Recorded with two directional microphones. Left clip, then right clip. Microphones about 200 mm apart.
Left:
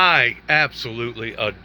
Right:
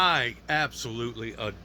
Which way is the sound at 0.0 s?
20° right (ahead or behind).